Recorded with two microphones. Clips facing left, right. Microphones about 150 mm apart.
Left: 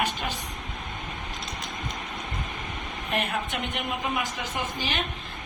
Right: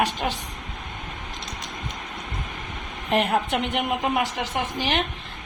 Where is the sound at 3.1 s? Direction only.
90° right.